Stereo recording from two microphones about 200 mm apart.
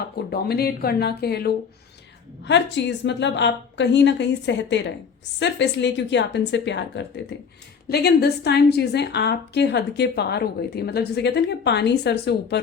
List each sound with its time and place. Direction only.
0.3 s a woman's voice: 50° left (ahead or behind)